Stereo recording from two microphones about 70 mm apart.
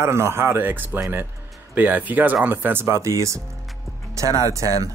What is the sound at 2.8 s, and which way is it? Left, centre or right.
Speech, right.